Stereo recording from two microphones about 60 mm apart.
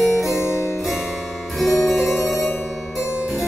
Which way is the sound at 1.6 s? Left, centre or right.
Centre.